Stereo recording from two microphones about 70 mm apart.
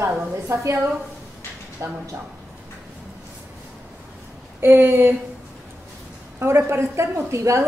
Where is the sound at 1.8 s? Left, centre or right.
Right.